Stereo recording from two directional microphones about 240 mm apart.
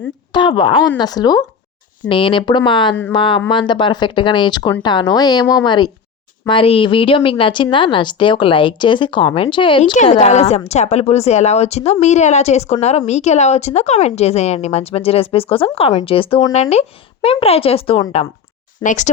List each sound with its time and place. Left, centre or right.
0.3 s speech: centre